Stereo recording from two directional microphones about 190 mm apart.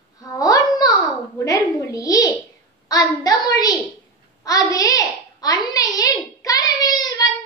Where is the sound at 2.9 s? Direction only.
20° left (ahead or behind).